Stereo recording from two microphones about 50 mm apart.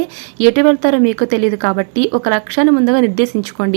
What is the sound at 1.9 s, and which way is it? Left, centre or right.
Speech, centre.